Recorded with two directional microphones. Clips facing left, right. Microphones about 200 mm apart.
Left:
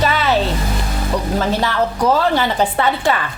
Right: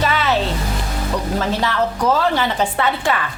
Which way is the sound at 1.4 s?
35° left (ahead or behind).